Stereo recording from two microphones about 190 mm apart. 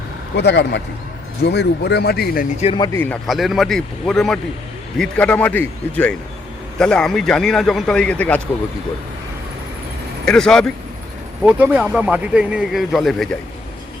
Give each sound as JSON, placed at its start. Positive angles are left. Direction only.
{"t": 0.3, "sound": "speech", "side_deg": 65}
{"t": 2.7, "sound": "speech", "side_deg": 20}
{"t": 3.0, "sound": "a man's voice", "side_deg": 5}
{"t": 10.2, "sound": "a man's voice", "side_deg": 5}
{"t": 11.4, "sound": "a man's voice", "side_deg": -10}